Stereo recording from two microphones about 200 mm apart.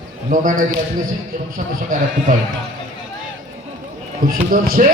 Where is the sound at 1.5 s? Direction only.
40° right (ahead or behind).